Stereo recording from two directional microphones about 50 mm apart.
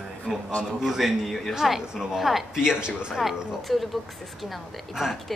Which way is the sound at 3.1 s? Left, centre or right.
Centre.